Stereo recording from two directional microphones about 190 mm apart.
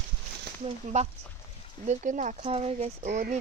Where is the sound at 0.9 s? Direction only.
40° right (ahead or behind).